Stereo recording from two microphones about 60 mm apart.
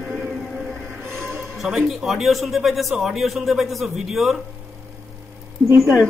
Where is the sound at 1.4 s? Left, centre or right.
Centre.